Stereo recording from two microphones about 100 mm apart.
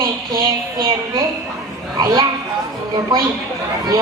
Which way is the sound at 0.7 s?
40° right (ahead or behind).